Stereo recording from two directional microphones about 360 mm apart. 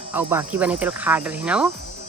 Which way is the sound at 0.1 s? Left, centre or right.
Centre.